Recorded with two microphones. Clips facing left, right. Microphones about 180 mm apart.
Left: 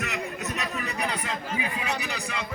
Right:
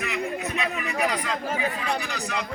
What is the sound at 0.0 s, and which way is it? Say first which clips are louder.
Music: right 3 dB; 45° left (ahead or behind).